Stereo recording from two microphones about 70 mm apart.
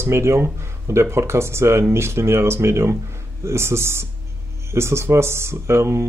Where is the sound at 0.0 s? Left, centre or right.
Right.